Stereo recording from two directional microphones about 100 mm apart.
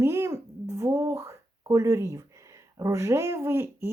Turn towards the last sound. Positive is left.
turn(degrees=-25)  # may be behind; listen again after turning